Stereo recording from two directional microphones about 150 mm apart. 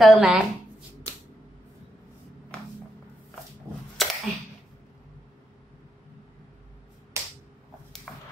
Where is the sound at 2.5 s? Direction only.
5° left (ahead or behind).